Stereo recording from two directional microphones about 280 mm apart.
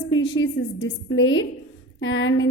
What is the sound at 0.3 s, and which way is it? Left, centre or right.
A woman's voice, left.